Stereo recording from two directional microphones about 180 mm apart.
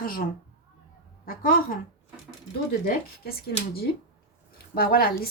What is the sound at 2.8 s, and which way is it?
Speech, 60° left (ahead or behind).